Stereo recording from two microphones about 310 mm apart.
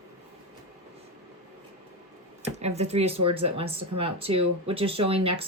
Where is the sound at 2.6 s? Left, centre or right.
Right.